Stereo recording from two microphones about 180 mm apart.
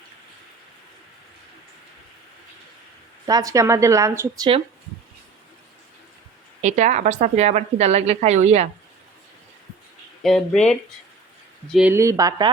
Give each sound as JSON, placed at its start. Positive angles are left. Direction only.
{"t": 3.2, "sound": "a woman's voice", "side_deg": -20}
{"t": 6.6, "sound": "a woman's voice", "side_deg": -40}
{"t": 10.2, "sound": "speech", "side_deg": 5}
{"t": 11.7, "sound": "a woman's voice", "side_deg": -10}